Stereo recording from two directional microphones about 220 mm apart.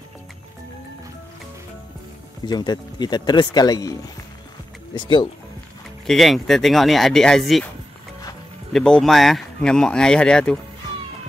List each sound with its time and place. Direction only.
2.4 s speech: 20° left (ahead or behind)
4.9 s speech: 20° left (ahead or behind)
6.0 s speech: centre (ahead or behind)
8.7 s speech: 5° left (ahead or behind)